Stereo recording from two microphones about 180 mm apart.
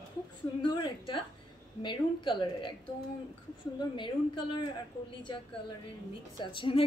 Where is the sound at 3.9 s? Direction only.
25° left (ahead or behind).